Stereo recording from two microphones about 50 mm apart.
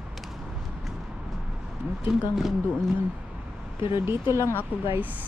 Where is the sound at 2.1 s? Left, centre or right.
Centre.